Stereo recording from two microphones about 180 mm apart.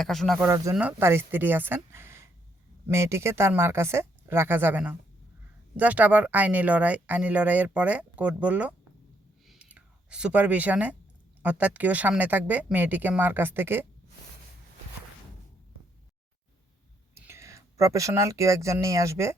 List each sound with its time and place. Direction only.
0.0 s speech: centre (ahead or behind)
0.3 s speech: 15° right (ahead or behind)
9.5 s whispering: 5° right (ahead or behind)
11.4 s speech: 10° right (ahead or behind)
17.2 s speech: 15° right (ahead or behind)